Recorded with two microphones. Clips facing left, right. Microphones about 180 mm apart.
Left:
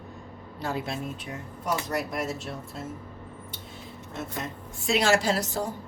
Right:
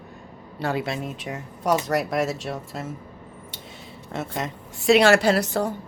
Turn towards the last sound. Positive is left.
turn(degrees=-65)  # may be behind; listen again after turning